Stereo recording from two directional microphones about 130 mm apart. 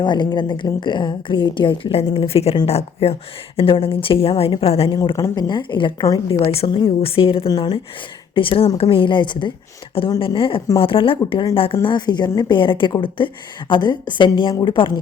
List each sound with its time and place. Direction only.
0.0 s a woman's voice: 35° left (ahead or behind)
4.9 s a woman's voice: 35° left (ahead or behind)
6.5 s a woman's voice: 50° left (ahead or behind)